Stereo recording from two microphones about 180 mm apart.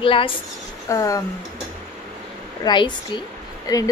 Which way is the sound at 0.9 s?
15° left (ahead or behind).